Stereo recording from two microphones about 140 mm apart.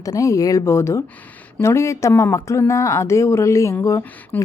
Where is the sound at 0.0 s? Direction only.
25° left (ahead or behind).